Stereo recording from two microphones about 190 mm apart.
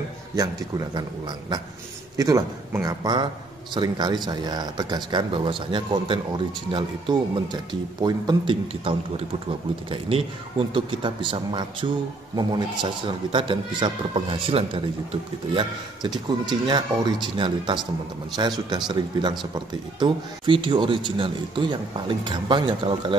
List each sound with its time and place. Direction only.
0.4 s speech: 20° right (ahead or behind)
2.1 s a man's voice: 15° right (ahead or behind)
16.4 s speech: 25° right (ahead or behind)